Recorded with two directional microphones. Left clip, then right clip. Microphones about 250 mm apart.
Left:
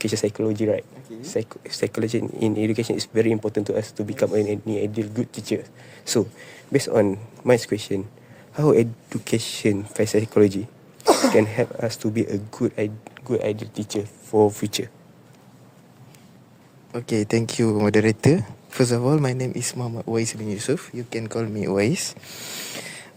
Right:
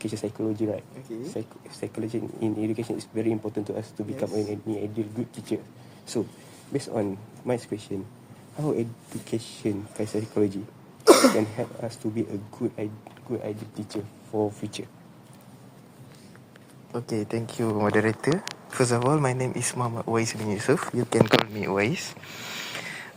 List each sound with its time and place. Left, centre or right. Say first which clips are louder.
0.0 s speech: left 7 dB; left
6.7 s speech: left 9 dB; left
11.0 s throat clearing: right 2 dB; centre
11.3 s speech: left 8 dB; left
17.1 s speech: left 9 dB; left
18.9 s speech: right 1 dB; left
19.1 s speech: left 2 dB; left
20.5 s speech: right 1 dB; left